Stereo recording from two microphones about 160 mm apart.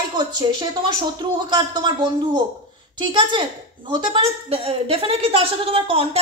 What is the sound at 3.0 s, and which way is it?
A woman's voice, 30° right (ahead or behind).